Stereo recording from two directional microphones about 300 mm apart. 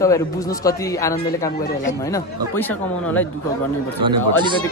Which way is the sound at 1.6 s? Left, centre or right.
Left.